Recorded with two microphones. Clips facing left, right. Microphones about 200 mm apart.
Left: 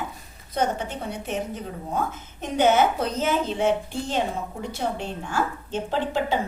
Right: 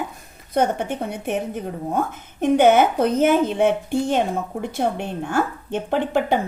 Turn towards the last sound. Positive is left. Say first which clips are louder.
# right 5 dB
turn(degrees=-55)  # may be behind; listen again after turning